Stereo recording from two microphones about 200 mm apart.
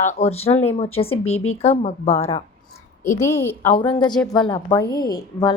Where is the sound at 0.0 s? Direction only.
35° left (ahead or behind).